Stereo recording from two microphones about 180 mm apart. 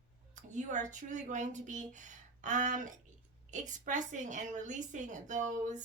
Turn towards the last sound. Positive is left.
turn(degrees=-45)  # may be behind; listen again after turning